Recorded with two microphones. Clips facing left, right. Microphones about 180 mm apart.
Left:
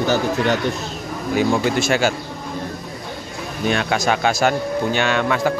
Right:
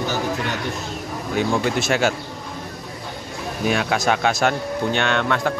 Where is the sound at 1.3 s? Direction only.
5° left (ahead or behind).